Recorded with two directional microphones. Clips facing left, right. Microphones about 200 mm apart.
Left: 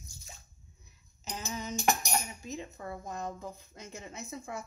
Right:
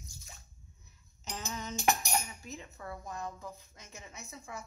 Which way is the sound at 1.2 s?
10° left (ahead or behind).